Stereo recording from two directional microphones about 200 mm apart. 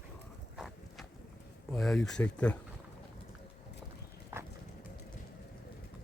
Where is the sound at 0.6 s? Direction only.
Centre (ahead or behind).